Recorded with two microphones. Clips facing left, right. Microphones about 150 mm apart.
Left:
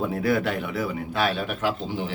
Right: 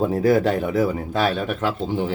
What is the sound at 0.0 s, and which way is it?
Speech, 40° right (ahead or behind).